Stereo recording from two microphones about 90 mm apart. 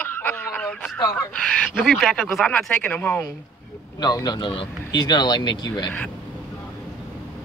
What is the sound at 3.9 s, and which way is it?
Speech, 50° left (ahead or behind).